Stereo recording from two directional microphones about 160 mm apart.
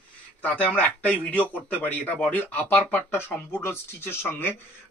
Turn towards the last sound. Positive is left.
turn(degrees=15)  # may be behind; listen again after turning